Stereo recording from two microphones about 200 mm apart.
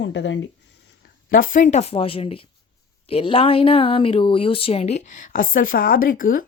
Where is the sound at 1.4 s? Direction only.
40° left (ahead or behind).